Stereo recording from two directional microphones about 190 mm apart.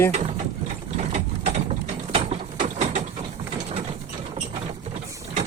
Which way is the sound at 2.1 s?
35° right (ahead or behind).